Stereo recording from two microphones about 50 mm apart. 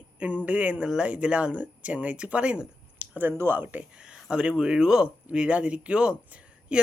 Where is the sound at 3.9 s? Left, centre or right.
Centre.